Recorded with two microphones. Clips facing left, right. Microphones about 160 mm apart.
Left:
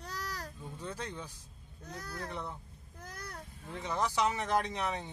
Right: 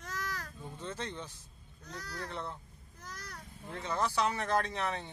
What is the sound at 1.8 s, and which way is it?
Speech, 50° left (ahead or behind).